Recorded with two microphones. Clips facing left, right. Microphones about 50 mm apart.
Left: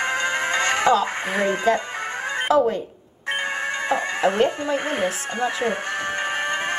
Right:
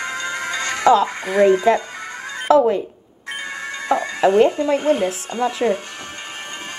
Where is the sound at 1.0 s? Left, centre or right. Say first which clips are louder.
Right 7 dB; left.